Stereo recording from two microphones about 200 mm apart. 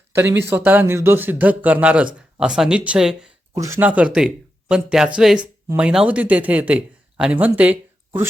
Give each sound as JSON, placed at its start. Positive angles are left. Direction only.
{"t": 0.1, "sound": "a man's voice", "side_deg": -10}
{"t": 3.5, "sound": "a man's voice", "side_deg": -15}